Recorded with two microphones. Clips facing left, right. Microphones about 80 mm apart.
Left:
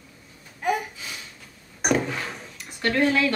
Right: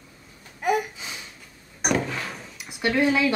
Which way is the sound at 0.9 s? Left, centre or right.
Right.